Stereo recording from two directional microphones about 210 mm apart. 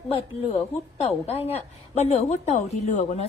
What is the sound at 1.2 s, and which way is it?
A woman's voice, 30° left (ahead or behind).